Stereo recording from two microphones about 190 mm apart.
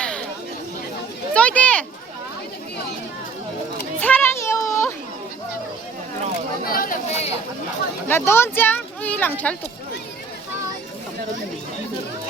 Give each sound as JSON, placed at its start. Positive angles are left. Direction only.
{"t": 1.3, "sound": "speech", "side_deg": 5}
{"t": 4.0, "sound": "children playing", "side_deg": 10}
{"t": 6.7, "sound": "chatter", "side_deg": 50}
{"t": 8.0, "sound": "speech", "side_deg": 10}